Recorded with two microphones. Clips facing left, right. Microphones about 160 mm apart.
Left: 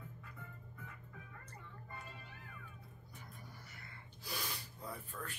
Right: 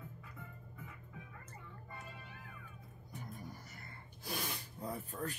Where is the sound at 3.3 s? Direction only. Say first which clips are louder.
Right 6 dB; 45° right (ahead or behind).